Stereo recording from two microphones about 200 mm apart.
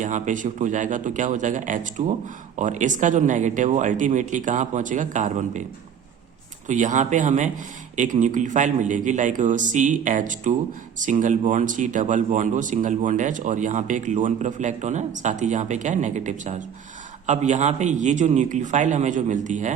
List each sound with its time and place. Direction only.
0.0 s a man's voice: 40° right (ahead or behind)
6.7 s a man's voice: 40° right (ahead or behind)